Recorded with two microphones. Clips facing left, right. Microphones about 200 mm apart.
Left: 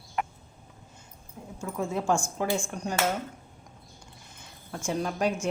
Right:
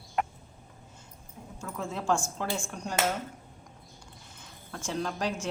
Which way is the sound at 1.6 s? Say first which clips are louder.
Left 3 dB; 15° left (ahead or behind).